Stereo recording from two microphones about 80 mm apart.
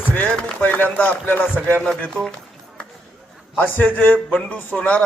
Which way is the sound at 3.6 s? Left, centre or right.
Left.